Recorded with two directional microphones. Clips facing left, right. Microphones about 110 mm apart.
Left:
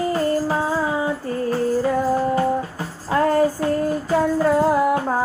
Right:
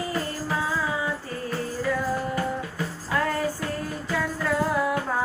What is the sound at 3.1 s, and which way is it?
Music, 35° left (ahead or behind).